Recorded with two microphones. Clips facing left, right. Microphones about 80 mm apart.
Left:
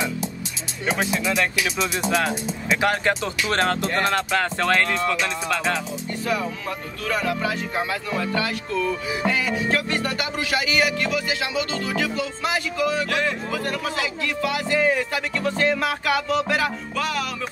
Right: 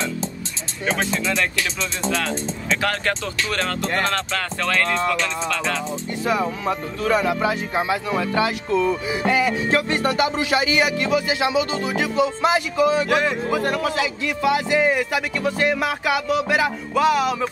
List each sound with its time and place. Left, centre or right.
0.8 s speech: centre
4.9 s speech: centre
6.2 s music: right